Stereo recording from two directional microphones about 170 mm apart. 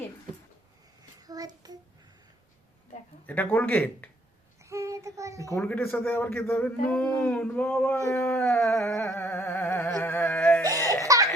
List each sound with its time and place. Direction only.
1.2 s child singing: 20° right (ahead or behind)
3.2 s music: 10° left (ahead or behind)
4.6 s child singing: 15° right (ahead or behind)
5.5 s music: 5° left (ahead or behind)
11.0 s music: 20° right (ahead or behind)